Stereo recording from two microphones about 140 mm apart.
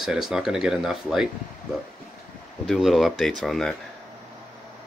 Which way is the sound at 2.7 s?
Centre (ahead or behind).